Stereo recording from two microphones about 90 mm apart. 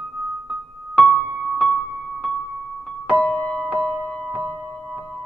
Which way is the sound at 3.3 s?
10° left (ahead or behind).